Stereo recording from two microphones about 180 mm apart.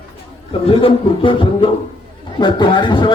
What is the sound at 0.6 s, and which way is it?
A man's voice, 30° left (ahead or behind).